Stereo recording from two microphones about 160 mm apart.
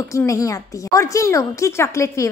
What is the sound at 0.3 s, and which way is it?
A woman's voice, 20° left (ahead or behind).